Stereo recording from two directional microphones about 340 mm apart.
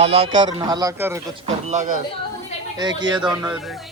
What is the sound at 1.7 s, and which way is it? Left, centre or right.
Speech, right.